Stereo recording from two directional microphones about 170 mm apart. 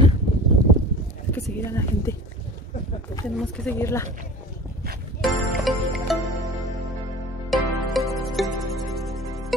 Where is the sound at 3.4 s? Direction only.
10° left (ahead or behind).